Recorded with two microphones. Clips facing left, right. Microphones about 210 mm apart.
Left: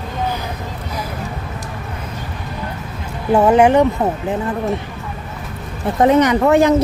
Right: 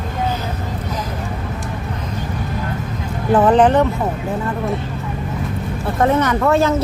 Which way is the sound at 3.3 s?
10° left (ahead or behind).